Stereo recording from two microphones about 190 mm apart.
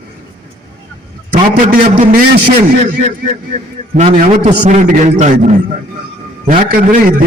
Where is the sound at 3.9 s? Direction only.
40° right (ahead or behind).